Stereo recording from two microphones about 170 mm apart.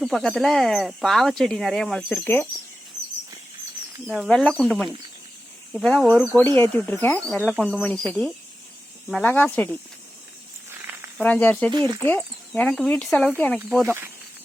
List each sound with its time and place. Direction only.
0.0 s speech: centre (ahead or behind)
4.0 s speech: centre (ahead or behind)
11.2 s speech: 10° left (ahead or behind)
11.7 s speech: 25° right (ahead or behind)
11.9 s speech: 10° left (ahead or behind)
13.8 s speech: 15° right (ahead or behind)